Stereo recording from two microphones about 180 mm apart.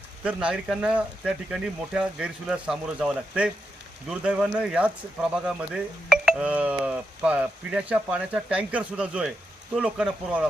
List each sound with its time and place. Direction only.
0.3 s speech: 5° right (ahead or behind)